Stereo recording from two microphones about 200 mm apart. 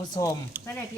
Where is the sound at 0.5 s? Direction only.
10° right (ahead or behind).